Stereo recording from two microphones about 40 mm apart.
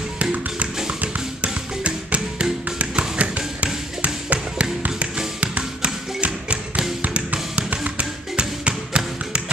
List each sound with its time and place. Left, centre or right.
0.2 s music: right
2.8 s tap: right
6.2 s bouncing: right
7.2 s music: right